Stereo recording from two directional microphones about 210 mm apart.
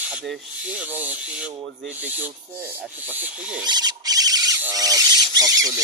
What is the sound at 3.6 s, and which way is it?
Squeal, 20° right (ahead or behind).